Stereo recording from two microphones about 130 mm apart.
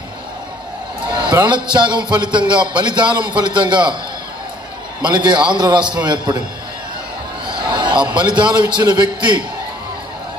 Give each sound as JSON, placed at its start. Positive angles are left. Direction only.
{"t": 1.2, "sound": "speech", "side_deg": -35}
{"t": 5.0, "sound": "speech", "side_deg": -35}
{"t": 7.4, "sound": "a sound", "side_deg": -40}
{"t": 8.5, "sound": "speech", "side_deg": -35}